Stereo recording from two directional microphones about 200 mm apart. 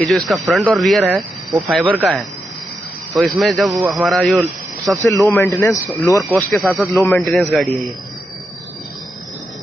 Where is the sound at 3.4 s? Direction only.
Centre (ahead or behind).